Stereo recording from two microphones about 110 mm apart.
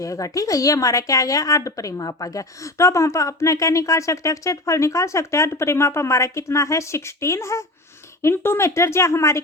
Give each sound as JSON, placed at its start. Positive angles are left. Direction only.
{"t": 0.0, "sound": "speech", "side_deg": 30}